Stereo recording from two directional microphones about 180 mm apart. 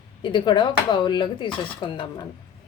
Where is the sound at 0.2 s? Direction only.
25° left (ahead or behind).